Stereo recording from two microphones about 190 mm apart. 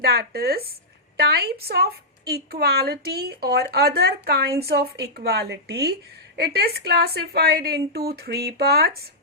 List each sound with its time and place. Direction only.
0.0 s a woman's voice: 55° right (ahead or behind)